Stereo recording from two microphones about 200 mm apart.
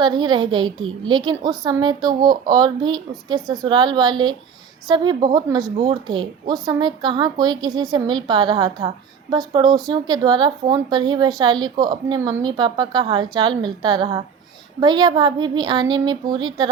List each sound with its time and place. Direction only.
0.0 s speech: 20° right (ahead or behind)